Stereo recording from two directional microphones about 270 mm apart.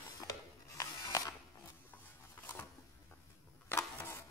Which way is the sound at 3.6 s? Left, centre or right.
Centre.